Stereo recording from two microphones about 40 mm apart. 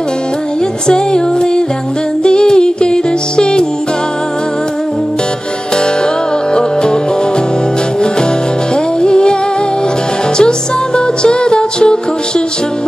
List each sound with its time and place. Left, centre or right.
0.8 s music: centre
6.5 s music: left
9.0 s music: left
11.0 s music: left